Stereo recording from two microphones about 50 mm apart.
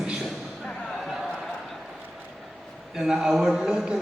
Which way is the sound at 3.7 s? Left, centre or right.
Centre.